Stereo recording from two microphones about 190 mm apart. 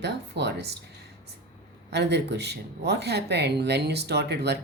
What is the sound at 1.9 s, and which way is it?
Speech, 60° right (ahead or behind).